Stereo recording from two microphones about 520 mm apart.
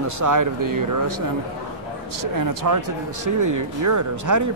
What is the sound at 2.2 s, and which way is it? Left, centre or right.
Speech, right.